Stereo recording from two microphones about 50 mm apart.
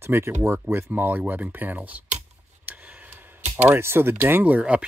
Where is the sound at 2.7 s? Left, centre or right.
Right.